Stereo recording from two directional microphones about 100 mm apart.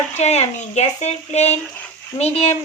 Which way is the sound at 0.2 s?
90° left.